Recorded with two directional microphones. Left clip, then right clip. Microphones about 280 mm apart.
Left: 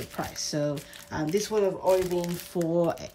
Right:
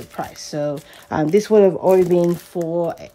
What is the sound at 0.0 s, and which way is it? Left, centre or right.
Speech, centre.